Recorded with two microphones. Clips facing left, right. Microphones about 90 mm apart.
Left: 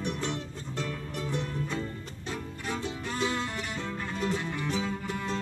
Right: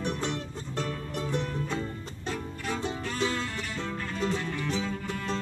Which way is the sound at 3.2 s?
20° left (ahead or behind).